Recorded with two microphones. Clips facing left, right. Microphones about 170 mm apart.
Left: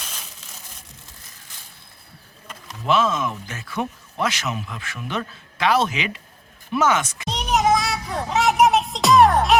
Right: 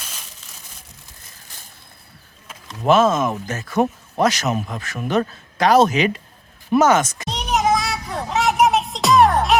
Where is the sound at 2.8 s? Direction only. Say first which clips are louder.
Right 5 dB; 45° right (ahead or behind).